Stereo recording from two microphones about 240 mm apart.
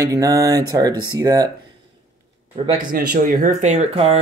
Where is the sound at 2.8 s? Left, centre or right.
Right.